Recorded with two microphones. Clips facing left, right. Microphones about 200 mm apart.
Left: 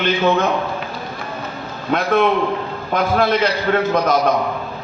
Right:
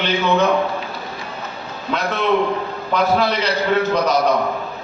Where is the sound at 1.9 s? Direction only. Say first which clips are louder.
Left 3 dB; 50° left (ahead or behind).